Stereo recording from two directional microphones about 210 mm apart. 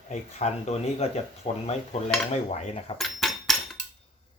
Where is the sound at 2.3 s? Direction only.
30° left (ahead or behind).